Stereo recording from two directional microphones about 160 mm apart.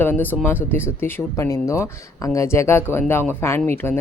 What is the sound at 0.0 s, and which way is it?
Speech, 10° left (ahead or behind).